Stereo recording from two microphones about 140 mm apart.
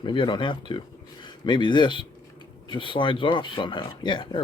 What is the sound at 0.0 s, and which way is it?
Speech, 35° left (ahead or behind).